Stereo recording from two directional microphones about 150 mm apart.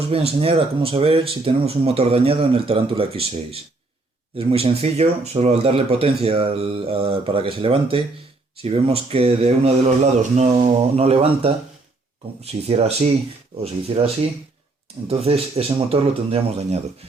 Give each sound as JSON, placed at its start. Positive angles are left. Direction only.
{"t": 0.1, "sound": "speech", "side_deg": -40}